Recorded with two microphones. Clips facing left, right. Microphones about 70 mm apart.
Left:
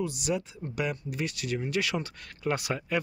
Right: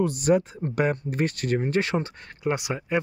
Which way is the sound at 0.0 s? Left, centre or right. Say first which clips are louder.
Right 9 dB; right.